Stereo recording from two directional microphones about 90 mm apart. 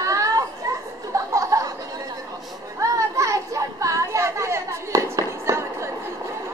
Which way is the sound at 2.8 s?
35° right (ahead or behind).